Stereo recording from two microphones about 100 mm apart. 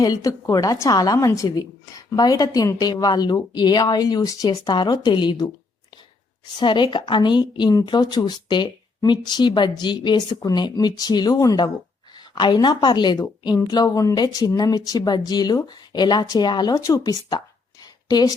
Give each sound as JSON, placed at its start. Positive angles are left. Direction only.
{"t": 0.0, "sound": "a woman's voice", "side_deg": 40}
{"t": 6.6, "sound": "a woman's voice", "side_deg": 50}